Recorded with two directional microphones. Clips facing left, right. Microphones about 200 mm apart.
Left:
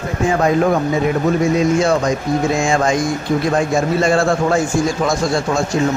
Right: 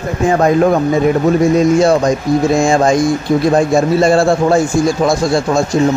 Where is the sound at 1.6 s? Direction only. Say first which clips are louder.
Right 5 dB; 40° right (ahead or behind).